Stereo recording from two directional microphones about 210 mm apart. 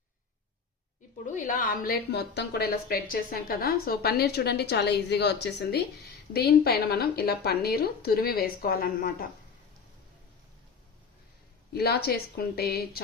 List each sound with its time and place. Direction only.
1.2 s a woman's voice: 40° left (ahead or behind)
11.7 s a woman's voice: 50° left (ahead or behind)